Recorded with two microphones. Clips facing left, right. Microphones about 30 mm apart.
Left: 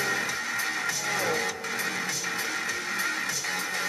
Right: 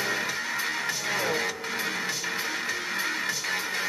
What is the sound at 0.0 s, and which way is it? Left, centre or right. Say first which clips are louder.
Music: even; centre.